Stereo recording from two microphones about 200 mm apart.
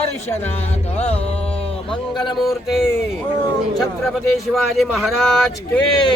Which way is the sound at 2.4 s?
Centre (ahead or behind).